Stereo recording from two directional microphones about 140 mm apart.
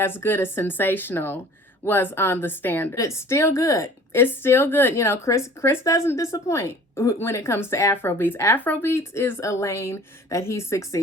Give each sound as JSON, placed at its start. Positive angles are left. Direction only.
{"t": 0.0, "sound": "a woman's voice", "side_deg": 15}